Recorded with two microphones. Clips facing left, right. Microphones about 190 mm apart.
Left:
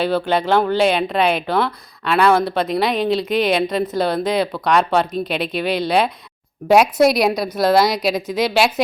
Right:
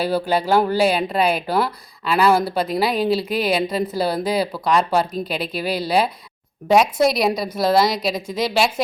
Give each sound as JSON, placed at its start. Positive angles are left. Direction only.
{"t": 0.3, "sound": "a woman's voice", "side_deg": -5}